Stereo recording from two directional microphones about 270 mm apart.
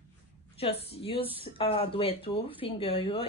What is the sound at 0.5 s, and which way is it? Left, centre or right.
Speech, left.